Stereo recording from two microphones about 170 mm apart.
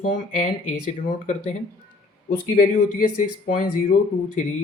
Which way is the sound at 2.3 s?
55° left (ahead or behind).